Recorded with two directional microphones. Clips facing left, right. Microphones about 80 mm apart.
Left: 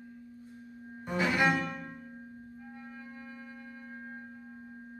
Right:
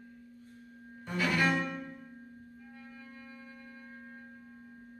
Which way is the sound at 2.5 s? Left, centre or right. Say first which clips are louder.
Left 4 dB; left.